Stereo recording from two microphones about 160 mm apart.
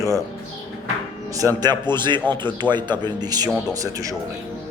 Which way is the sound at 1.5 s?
25° right (ahead or behind).